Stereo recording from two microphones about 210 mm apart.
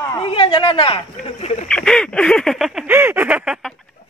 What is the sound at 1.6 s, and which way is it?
Quack, 5° left (ahead or behind).